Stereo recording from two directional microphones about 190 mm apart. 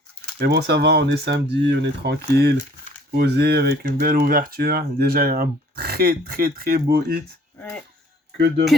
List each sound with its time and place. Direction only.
0.3 s speech: 60° right (ahead or behind)